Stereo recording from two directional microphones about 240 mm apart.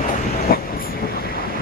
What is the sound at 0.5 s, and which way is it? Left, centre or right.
Train, left.